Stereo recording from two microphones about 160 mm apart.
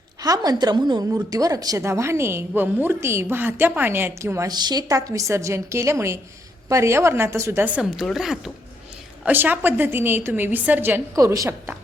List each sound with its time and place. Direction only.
0.2 s a woman's voice: 25° right (ahead or behind)
7.8 s a woman's voice: centre (ahead or behind)
9.2 s a woman's voice: 10° right (ahead or behind)